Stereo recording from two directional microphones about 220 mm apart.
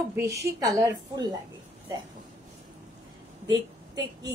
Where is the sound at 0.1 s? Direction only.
15° right (ahead or behind).